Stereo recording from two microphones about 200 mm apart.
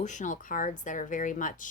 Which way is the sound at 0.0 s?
40° left (ahead or behind).